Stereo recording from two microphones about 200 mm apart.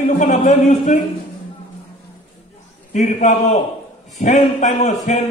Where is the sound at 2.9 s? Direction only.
35° left (ahead or behind).